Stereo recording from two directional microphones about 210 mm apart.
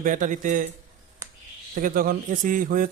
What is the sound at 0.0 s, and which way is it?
Speech, 40° right (ahead or behind).